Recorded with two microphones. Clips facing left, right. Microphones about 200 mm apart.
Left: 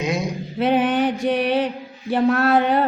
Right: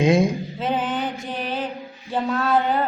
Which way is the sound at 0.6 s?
70° left (ahead or behind).